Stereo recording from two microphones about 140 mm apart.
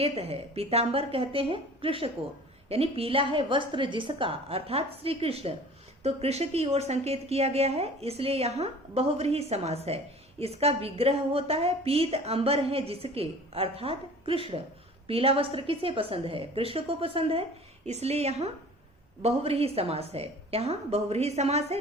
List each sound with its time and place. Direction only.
0.0 s a woman's voice: 45° right (ahead or behind)